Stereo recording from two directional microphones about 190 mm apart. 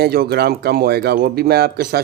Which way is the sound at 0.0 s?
55° right (ahead or behind).